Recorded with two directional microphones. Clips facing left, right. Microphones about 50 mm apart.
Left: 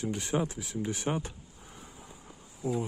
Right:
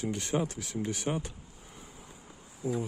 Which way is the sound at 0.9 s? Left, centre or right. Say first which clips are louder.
Left 2 dB; left.